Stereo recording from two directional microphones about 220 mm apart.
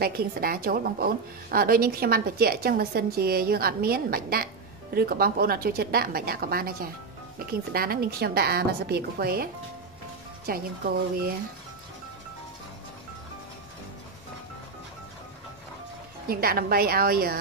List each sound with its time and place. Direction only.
0.0 s a woman's voice: 45° right (ahead or behind)
16.3 s a woman's voice: 45° right (ahead or behind)